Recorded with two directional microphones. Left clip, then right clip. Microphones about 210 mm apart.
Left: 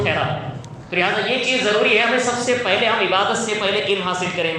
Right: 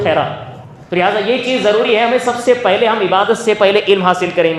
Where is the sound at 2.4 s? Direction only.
35° right (ahead or behind).